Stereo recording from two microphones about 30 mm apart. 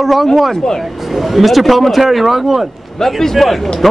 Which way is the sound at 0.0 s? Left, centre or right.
Centre.